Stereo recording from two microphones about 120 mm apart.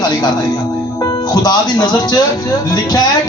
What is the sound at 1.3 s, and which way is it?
Speech, 35° left (ahead or behind).